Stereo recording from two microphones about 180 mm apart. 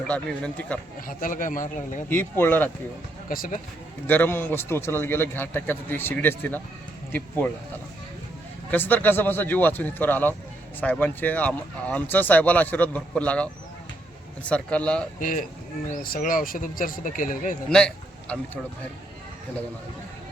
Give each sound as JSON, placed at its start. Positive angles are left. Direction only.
{"t": 0.1, "sound": "speech", "side_deg": 5}
{"t": 1.0, "sound": "speech", "side_deg": 50}
{"t": 2.0, "sound": "speech", "side_deg": 10}
{"t": 3.2, "sound": "speech", "side_deg": 50}
{"t": 4.0, "sound": "speech", "side_deg": 10}
{"t": 8.7, "sound": "speech", "side_deg": 10}
{"t": 14.5, "sound": "speech", "side_deg": 5}
{"t": 15.2, "sound": "speech", "side_deg": 50}
{"t": 17.7, "sound": "speech", "side_deg": 5}